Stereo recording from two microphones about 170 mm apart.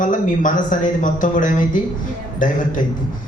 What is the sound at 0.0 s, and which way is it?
A man's voice, 50° left (ahead or behind).